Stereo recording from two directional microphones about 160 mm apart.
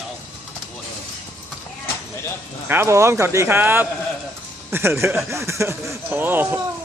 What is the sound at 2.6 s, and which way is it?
Speech, 15° right (ahead or behind).